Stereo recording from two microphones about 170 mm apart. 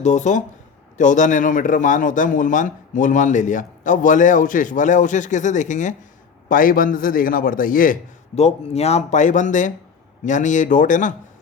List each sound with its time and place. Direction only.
0.0 s a man's voice: 45° left (ahead or behind)
8.4 s a man's voice: 40° left (ahead or behind)